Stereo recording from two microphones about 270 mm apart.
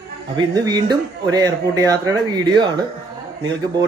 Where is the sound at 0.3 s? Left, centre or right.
Centre.